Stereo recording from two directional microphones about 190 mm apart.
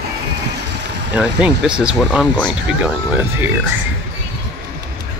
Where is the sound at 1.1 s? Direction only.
5° right (ahead or behind).